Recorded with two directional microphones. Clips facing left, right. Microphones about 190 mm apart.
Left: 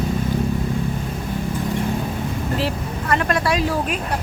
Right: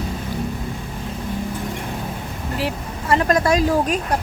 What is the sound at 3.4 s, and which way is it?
Speech, 45° right (ahead or behind).